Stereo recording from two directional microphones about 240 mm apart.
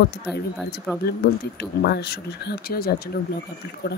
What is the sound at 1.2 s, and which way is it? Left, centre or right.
Speech, left.